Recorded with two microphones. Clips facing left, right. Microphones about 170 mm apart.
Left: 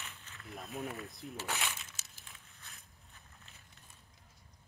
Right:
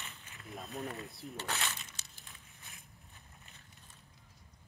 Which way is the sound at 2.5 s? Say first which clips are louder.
Right 1 dB; 20° right (ahead or behind).